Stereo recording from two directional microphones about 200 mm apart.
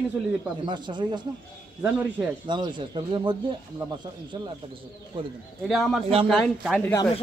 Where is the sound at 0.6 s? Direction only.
20° right (ahead or behind).